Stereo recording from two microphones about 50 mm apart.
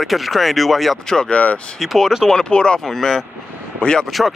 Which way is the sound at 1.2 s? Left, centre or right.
Left.